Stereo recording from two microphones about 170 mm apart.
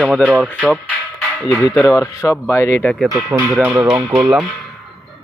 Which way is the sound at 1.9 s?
20° left (ahead or behind).